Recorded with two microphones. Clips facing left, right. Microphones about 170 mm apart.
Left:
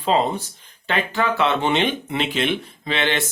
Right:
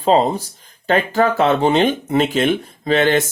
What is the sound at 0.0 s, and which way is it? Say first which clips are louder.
Speech: right 5 dB; 40° right (ahead or behind).